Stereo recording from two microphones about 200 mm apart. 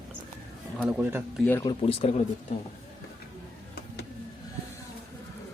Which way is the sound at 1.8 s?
30° left (ahead or behind).